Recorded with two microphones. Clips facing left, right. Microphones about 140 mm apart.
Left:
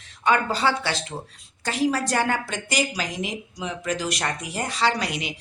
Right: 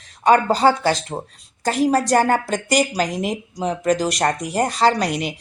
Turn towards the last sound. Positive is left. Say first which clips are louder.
# right 6 dB
turn(degrees=-40)  # may be behind; listen again after turning